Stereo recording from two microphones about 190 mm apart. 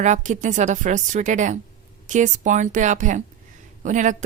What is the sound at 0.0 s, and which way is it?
A woman's voice, 40° right (ahead or behind).